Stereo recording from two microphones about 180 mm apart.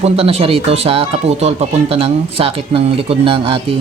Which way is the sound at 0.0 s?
35° right (ahead or behind).